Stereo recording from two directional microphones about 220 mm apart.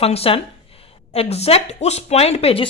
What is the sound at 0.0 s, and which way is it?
Speech, 25° left (ahead or behind).